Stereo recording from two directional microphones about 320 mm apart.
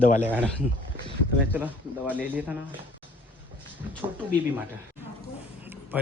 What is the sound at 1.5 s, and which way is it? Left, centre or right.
Speech, centre.